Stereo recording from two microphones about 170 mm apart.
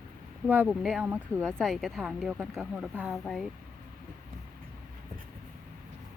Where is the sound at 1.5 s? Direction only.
Centre (ahead or behind).